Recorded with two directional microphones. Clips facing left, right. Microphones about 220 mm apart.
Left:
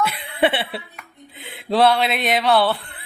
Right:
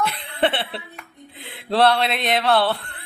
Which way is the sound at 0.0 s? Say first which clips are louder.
Left 2 dB; centre (ahead or behind).